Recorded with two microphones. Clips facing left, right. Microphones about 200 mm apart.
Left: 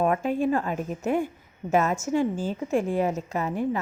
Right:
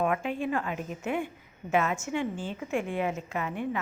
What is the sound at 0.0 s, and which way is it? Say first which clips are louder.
A woman's voice: left 5 dB; 40° left (ahead or behind).